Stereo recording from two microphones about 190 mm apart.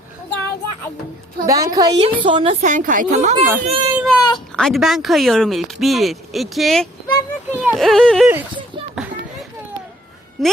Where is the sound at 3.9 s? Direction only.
Centre (ahead or behind).